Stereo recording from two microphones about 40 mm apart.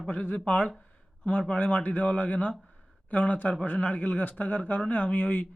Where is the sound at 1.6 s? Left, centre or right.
Left.